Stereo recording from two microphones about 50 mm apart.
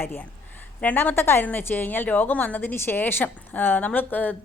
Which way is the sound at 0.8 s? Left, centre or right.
Left.